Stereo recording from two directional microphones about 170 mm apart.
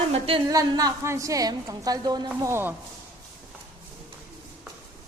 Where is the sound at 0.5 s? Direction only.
20° right (ahead or behind).